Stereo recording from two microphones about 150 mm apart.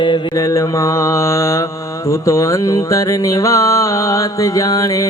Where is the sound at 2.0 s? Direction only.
20° left (ahead or behind).